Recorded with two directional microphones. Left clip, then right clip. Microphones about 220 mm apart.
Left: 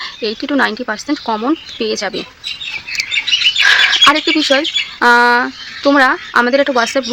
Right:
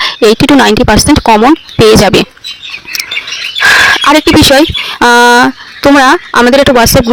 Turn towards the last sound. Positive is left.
turn(degrees=-40)  # may be behind; listen again after turning